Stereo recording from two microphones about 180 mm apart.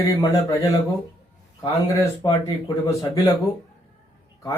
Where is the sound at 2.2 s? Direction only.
20° left (ahead or behind).